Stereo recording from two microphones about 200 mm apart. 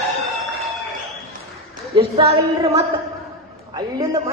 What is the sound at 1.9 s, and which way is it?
Speech, 30° right (ahead or behind).